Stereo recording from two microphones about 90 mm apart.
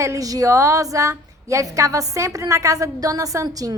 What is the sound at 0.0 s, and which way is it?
A woman's voice, 40° right (ahead or behind).